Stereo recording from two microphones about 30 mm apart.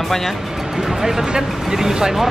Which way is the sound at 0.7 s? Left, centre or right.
Centre.